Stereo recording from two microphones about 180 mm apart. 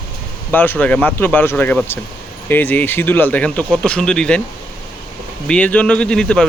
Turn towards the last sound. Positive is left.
turn(degrees=5)  # may be behind; listen again after turning